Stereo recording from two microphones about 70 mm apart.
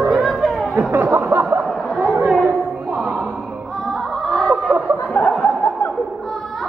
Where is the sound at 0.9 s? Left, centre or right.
Right.